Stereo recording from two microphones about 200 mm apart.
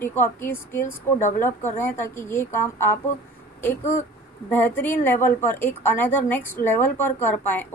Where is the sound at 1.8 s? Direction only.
10° left (ahead or behind).